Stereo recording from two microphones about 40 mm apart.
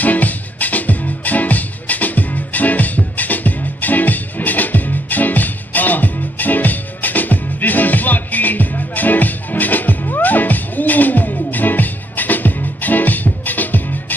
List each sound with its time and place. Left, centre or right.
0.0 s music: left